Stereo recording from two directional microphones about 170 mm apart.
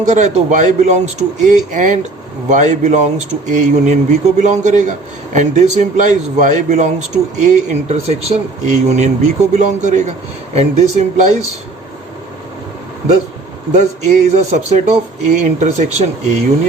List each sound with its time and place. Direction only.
0.0 s speech: 45° right (ahead or behind)
13.7 s speech: 45° right (ahead or behind)